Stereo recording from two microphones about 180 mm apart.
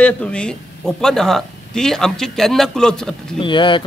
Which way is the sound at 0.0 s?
5° left (ahead or behind).